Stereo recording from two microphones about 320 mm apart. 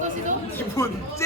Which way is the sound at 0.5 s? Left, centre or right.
Centre.